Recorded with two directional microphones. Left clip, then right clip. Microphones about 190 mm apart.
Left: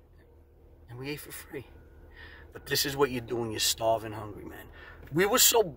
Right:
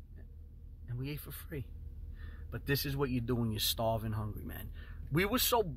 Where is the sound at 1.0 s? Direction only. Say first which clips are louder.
Left 7 dB; 10° left (ahead or behind).